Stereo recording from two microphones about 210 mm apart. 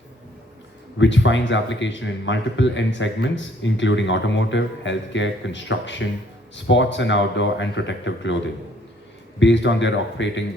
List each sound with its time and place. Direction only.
0.9 s a man's voice: 60° left (ahead or behind)
9.4 s a man's voice: 60° left (ahead or behind)